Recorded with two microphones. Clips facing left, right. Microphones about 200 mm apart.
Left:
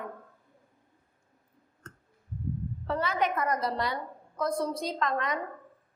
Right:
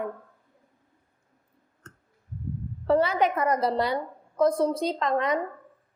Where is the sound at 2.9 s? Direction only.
30° right (ahead or behind).